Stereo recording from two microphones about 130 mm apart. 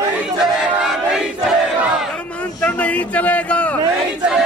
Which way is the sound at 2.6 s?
10° left (ahead or behind).